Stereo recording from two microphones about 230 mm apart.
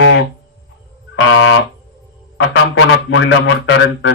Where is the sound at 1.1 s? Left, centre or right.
Left.